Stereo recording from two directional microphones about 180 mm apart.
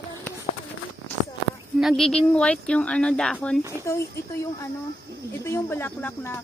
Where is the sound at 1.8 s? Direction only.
Centre (ahead or behind).